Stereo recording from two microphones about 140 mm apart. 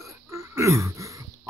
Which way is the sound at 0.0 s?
20° right (ahead or behind).